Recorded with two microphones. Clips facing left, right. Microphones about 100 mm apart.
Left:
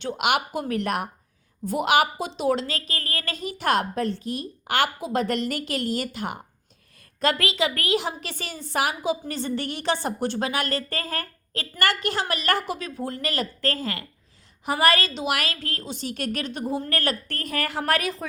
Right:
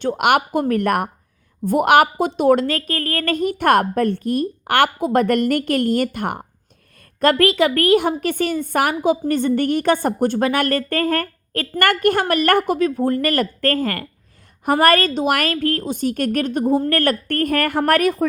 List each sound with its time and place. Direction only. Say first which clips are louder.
0.0 s a woman's voice: right 7 dB; 50° right (ahead or behind)